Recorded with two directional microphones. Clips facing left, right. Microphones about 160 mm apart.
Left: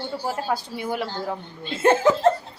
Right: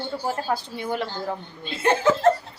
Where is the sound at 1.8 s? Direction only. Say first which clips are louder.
Left 4 dB; 45° left (ahead or behind).